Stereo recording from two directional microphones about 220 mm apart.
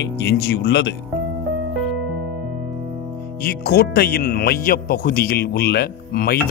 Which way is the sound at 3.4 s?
45° left (ahead or behind).